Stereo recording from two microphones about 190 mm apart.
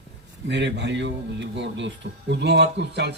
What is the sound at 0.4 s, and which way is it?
Speech, 65° right (ahead or behind).